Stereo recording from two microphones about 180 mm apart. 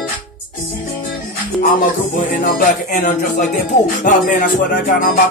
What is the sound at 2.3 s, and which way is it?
Music, 55° left (ahead or behind).